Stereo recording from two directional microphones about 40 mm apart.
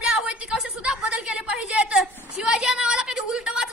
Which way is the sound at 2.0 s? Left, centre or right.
Right.